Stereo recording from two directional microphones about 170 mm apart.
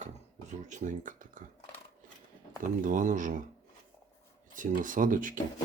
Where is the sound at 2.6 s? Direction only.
50° right (ahead or behind).